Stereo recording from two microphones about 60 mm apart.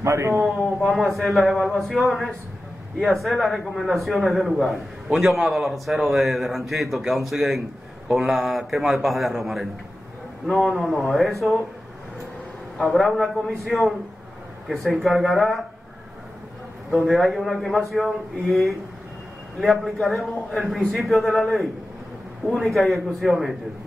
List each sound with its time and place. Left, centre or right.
0.0 s a man's voice: right
0.5 s a man's voice: centre
12.7 s a man's voice: centre
17.0 s a man's voice: centre